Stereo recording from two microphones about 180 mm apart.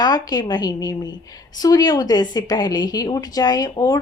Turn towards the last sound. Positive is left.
turn(degrees=20)  # may be behind; listen again after turning